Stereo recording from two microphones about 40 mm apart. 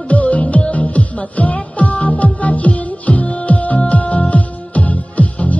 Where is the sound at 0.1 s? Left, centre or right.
Left.